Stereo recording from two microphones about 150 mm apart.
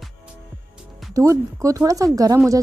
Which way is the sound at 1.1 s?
20° right (ahead or behind).